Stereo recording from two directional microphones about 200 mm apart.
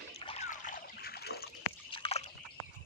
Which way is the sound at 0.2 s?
30° left (ahead or behind).